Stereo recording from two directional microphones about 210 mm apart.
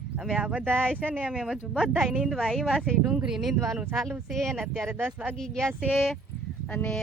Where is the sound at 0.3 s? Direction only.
5° right (ahead or behind).